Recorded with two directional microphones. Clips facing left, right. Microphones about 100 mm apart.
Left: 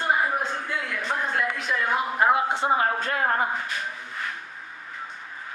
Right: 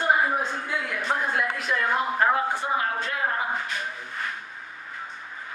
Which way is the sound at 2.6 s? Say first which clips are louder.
Left 4 dB; 20° left (ahead or behind).